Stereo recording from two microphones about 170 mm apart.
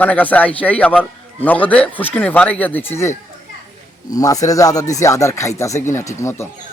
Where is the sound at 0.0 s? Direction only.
10° left (ahead or behind).